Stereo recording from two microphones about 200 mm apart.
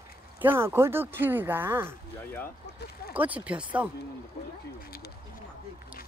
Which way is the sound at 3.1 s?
5° right (ahead or behind).